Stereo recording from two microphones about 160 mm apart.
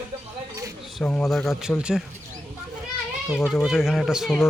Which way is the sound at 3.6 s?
Centre (ahead or behind).